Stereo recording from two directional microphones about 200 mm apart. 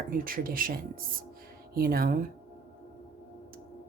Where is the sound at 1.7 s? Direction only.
45° right (ahead or behind).